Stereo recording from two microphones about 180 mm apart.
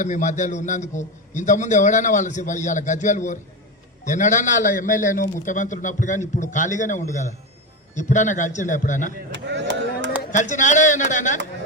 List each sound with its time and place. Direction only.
0.0 s a man's voice: 45° left (ahead or behind)
9.3 s a sound: 80° right
10.3 s a man's voice: 40° left (ahead or behind)